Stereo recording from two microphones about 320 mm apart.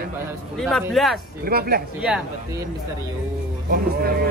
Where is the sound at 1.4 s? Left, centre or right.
Right.